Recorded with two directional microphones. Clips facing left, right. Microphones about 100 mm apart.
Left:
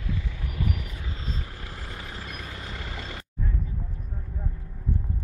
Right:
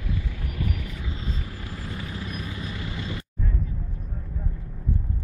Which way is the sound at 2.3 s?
55° left (ahead or behind).